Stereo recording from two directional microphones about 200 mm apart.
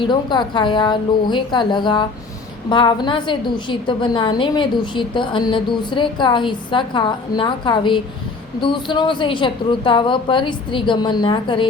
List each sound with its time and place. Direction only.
0.0 s a woman's voice: 20° left (ahead or behind)